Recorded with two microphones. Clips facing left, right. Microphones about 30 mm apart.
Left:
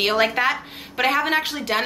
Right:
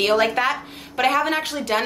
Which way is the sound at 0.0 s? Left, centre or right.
Centre.